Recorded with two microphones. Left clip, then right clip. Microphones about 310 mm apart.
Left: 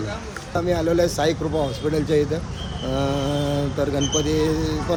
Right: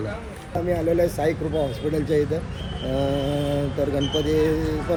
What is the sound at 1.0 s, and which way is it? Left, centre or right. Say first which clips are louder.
Speech: left 2 dB; centre.